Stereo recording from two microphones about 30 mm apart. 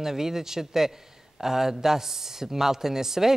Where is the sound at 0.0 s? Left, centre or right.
Centre.